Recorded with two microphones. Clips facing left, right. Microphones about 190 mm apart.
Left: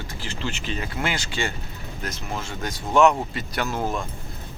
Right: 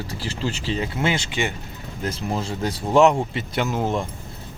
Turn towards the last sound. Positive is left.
turn(degrees=-20)  # may be behind; listen again after turning